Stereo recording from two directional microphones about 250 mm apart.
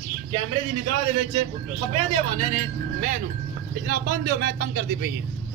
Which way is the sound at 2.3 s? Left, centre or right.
Right.